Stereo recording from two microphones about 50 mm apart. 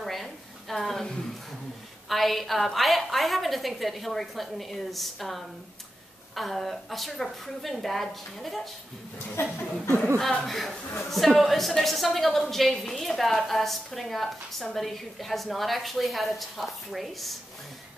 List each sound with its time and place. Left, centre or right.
0.0 s a sound: centre
2.0 s a woman's voice: centre
9.3 s speech: left
10.1 s a woman's voice: centre